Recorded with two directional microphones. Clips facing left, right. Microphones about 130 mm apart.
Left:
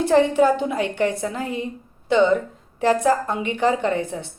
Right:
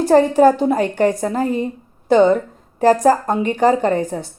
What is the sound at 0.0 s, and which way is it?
A woman's voice, 40° right (ahead or behind).